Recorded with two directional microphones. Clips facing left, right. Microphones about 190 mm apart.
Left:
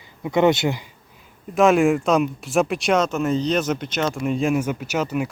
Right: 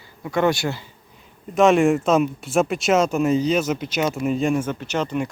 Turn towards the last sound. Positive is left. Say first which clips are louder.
# even
turn(degrees=5)  # may be behind; listen again after turning